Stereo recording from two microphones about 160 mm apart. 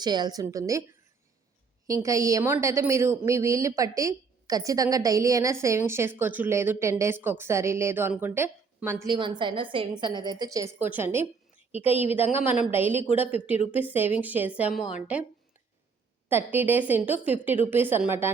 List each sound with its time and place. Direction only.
0.0 s a woman's voice: 25° right (ahead or behind)
1.9 s a woman's voice: 20° right (ahead or behind)
9.1 s a woman's voice: 30° right (ahead or behind); by 11.2 s 15° right (ahead or behind)
12.0 s speech: 35° left (ahead or behind)
12.7 s a woman's voice: 15° right (ahead or behind)
14.6 s a woman's voice: centre (ahead or behind)
16.3 s a woman's voice: 10° right (ahead or behind)